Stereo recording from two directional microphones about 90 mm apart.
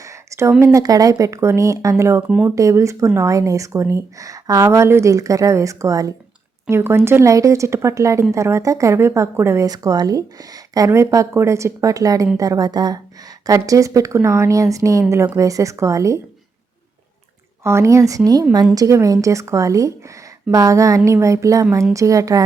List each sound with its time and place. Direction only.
0.0 s a sound: 35° right (ahead or behind)
0.6 s speech: 40° right (ahead or behind)
9.6 s a woman's voice: 45° right (ahead or behind)
17.6 s speech: 30° right (ahead or behind)